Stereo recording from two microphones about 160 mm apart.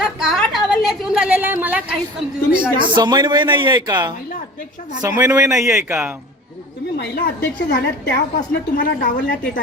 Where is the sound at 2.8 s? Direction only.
30° right (ahead or behind).